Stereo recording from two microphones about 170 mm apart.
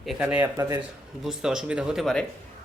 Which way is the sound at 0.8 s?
5° right (ahead or behind).